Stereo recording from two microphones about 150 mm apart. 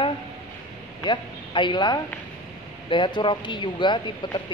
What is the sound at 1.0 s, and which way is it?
A man's voice, 30° left (ahead or behind).